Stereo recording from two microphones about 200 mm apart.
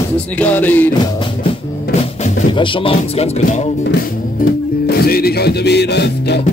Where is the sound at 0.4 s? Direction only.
10° left (ahead or behind).